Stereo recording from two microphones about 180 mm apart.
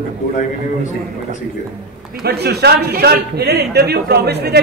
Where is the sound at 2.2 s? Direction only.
60° right (ahead or behind).